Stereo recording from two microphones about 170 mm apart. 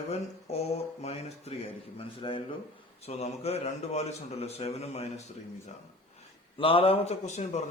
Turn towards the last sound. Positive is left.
turn(degrees=40)  # may be behind; listen again after turning